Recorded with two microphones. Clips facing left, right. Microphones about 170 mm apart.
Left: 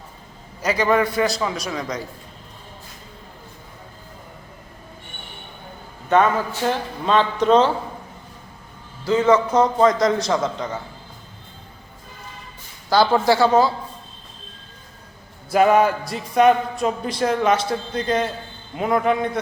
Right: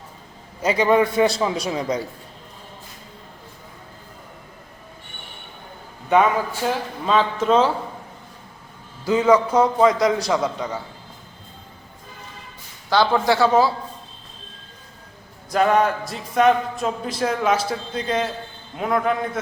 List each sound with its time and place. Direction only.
0.6 s a man's voice: 25° right (ahead or behind)
6.1 s speech: 10° right (ahead or behind)
9.0 s a man's voice: 10° right (ahead or behind)
12.9 s speech: 5° left (ahead or behind)
15.5 s speech: 5° left (ahead or behind)